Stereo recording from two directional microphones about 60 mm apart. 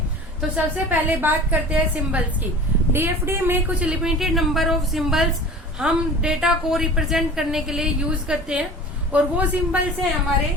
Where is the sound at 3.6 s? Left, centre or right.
Right.